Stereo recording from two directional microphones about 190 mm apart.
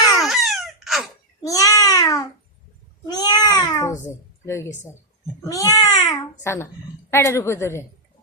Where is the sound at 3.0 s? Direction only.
20° left (ahead or behind).